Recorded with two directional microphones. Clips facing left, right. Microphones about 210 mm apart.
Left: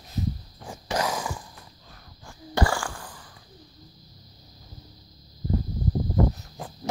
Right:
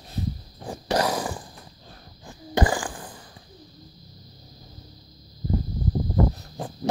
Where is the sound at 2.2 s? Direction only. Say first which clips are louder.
Right 2 dB; 20° right (ahead or behind).